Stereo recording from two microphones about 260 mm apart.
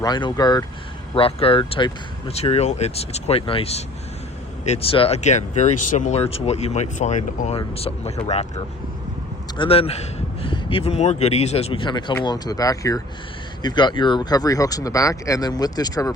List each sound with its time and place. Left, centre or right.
0.0 s speech: centre